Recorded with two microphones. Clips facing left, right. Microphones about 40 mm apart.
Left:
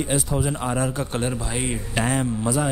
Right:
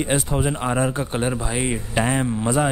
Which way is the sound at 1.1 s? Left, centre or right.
Centre.